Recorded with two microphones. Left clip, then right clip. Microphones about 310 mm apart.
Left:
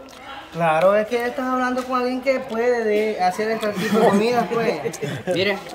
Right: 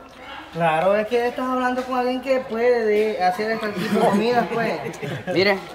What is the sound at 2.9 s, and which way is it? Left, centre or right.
A woman's voice, left.